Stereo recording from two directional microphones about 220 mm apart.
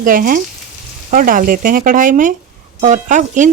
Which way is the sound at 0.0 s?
40° right (ahead or behind).